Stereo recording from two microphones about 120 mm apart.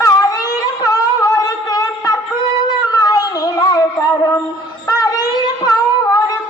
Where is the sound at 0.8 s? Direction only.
30° left (ahead or behind).